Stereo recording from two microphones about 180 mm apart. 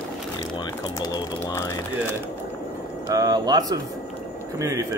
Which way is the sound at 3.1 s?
20° right (ahead or behind).